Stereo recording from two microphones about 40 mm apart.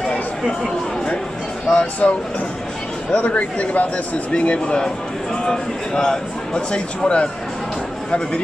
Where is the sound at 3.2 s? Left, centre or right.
Left.